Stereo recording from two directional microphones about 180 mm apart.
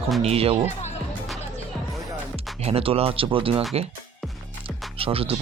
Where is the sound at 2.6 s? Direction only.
30° right (ahead or behind).